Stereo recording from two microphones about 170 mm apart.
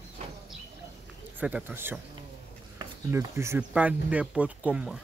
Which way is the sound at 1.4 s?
10° right (ahead or behind).